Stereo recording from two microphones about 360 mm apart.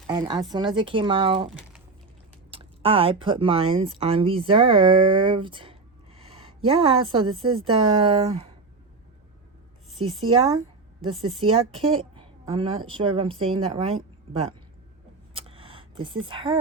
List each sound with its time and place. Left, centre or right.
0.1 s speech: centre
10.0 s speech: centre
15.4 s a sound: centre